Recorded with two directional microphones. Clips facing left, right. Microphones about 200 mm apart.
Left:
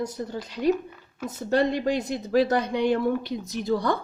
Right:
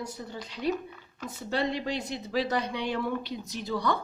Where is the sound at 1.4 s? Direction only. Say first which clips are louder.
Left 7 dB; 45° left (ahead or behind).